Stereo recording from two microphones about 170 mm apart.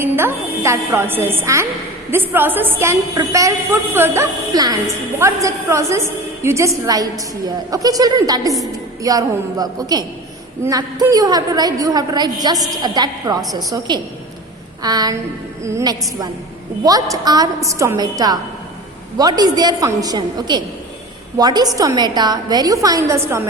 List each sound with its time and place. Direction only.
0.0 s a woman's voice: 15° right (ahead or behind)